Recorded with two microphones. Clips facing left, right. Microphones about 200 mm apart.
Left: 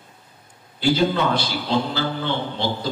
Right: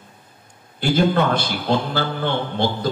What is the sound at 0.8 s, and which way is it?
A man's voice, 55° right (ahead or behind).